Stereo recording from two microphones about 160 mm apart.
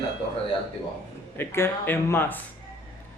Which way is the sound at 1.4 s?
15° left (ahead or behind).